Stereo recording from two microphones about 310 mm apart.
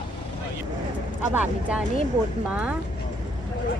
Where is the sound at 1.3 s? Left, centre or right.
Centre.